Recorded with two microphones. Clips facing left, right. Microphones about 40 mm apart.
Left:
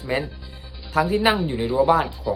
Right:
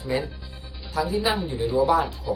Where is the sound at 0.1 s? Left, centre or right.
Left.